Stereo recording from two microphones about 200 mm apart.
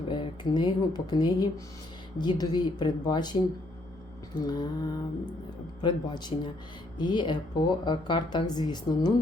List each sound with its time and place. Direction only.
0.1 s speech: 25° left (ahead or behind)
4.4 s speech: 20° left (ahead or behind)